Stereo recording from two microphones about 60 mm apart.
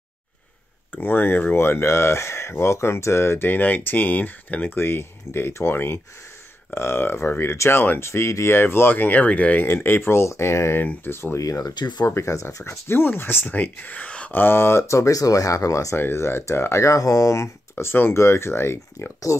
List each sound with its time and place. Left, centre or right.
0.9 s speech: left
3.4 s speech: left
8.5 s speech: left
9.7 s speech: left
10.8 s speech: left
11.3 s speech: left
12.1 s speech: left
14.3 s speech: left
16.0 s speech: left
17.9 s speech: left
19.3 s speech: left